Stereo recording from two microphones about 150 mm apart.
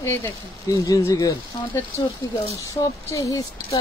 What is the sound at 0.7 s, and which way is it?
Speech, 20° left (ahead or behind).